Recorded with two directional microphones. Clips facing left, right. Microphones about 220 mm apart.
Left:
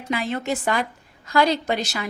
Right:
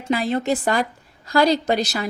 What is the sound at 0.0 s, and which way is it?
A woman's voice, 35° right (ahead or behind).